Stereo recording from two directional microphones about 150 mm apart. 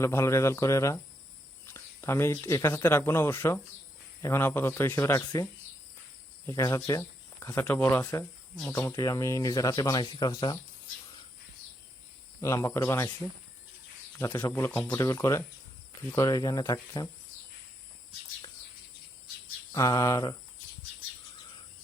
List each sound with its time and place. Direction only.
0.0 s speech: 15° left (ahead or behind)
12.4 s speech: 20° left (ahead or behind)
14.2 s speech: 15° left (ahead or behind)
19.7 s speech: 20° left (ahead or behind)